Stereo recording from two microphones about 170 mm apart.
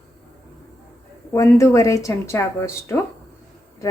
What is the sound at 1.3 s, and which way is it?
A woman's voice, 20° left (ahead or behind).